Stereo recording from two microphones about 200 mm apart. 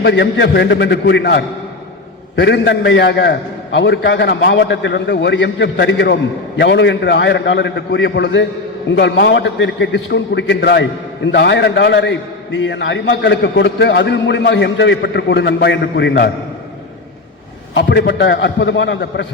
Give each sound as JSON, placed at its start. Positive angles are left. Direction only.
{"t": 0.0, "sound": "a man's voice", "side_deg": 60}
{"t": 17.7, "sound": "a man's voice", "side_deg": 65}